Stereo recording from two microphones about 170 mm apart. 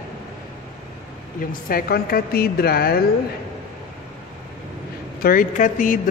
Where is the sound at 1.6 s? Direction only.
60° left (ahead or behind).